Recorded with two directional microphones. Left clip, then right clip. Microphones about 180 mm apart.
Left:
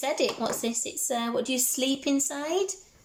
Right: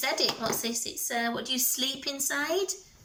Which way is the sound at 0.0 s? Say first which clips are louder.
Left 1 dB; 20° left (ahead or behind).